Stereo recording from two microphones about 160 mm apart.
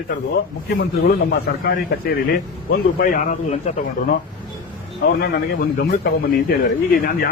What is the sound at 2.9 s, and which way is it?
Speech, 55° left (ahead or behind).